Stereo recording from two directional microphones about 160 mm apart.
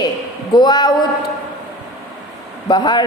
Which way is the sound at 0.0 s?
25° left (ahead or behind).